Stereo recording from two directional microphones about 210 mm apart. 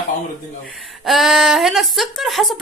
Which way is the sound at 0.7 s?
Centre (ahead or behind).